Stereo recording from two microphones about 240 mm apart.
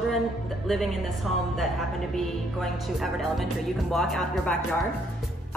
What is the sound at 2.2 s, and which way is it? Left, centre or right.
A woman's voice, centre.